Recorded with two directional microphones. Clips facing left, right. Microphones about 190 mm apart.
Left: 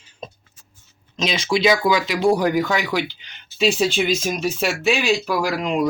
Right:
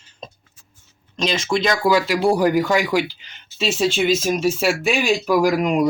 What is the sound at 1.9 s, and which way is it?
Speech, 10° right (ahead or behind).